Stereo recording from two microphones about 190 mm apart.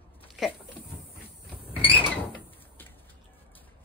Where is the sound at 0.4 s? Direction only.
Centre (ahead or behind).